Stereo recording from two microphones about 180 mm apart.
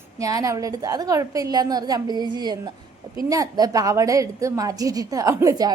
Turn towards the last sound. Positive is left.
turn(degrees=-20)  # may be behind; listen again after turning